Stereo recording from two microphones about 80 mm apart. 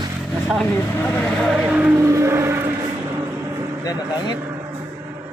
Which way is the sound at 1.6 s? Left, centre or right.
Centre.